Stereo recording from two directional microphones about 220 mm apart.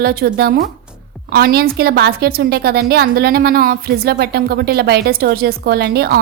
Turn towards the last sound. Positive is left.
turn(degrees=-45)  # may be behind; listen again after turning